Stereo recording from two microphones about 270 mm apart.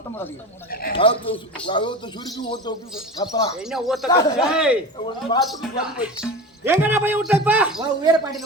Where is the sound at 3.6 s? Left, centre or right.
Centre.